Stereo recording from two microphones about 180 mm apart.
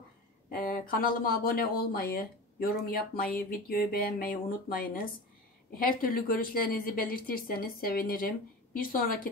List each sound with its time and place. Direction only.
0.5 s speech: 55° left (ahead or behind)